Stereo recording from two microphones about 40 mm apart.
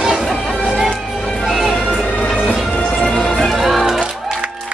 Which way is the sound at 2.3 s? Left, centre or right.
Left.